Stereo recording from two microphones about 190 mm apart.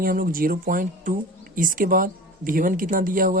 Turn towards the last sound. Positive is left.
turn(degrees=-45)  # may be behind; listen again after turning